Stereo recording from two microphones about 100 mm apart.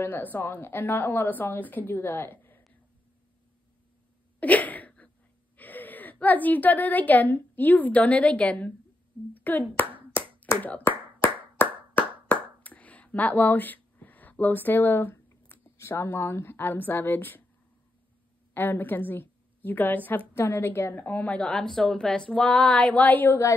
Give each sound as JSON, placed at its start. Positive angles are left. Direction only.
{"t": 0.0, "sound": "a woman's voice", "side_deg": 20}
{"t": 4.4, "sound": "a sound", "side_deg": 15}
{"t": 5.6, "sound": "a woman's voice", "side_deg": 15}
{"t": 10.6, "sound": "clapping", "side_deg": 15}
{"t": 12.6, "sound": "speech", "side_deg": 15}
{"t": 18.5, "sound": "a woman's voice", "side_deg": 20}
{"t": 21.5, "sound": "speech", "side_deg": 5}